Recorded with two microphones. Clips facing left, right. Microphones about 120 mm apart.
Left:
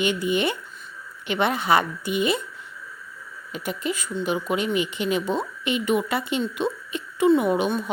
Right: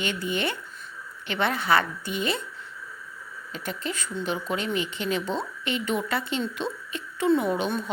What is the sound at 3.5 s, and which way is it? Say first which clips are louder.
Speech: left 4 dB; 15° left (ahead or behind).